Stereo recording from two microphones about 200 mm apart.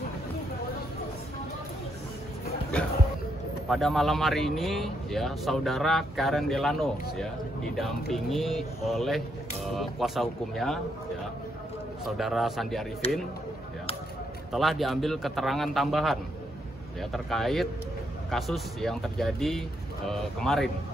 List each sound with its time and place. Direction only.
3.6 s speech: centre (ahead or behind)
12.2 s speech: centre (ahead or behind)
13.0 s speech: 30° left (ahead or behind)
14.5 s speech: centre (ahead or behind)